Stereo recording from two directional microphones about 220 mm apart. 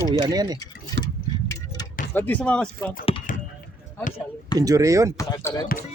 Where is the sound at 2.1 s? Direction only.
10° left (ahead or behind).